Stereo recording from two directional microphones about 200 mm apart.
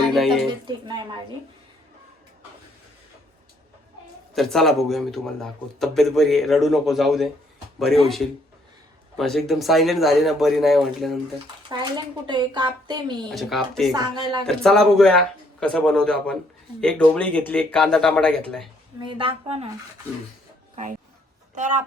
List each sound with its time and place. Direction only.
0.1 s speech: centre (ahead or behind)
0.4 s speech: 25° right (ahead or behind)
4.4 s speech: centre (ahead or behind)
11.7 s speech: 20° right (ahead or behind)
13.3 s speech: centre (ahead or behind)
13.9 s speech: 20° right (ahead or behind)
14.4 s speech: centre (ahead or behind)
18.9 s speech: 25° right (ahead or behind)
21.5 s speech: 35° right (ahead or behind)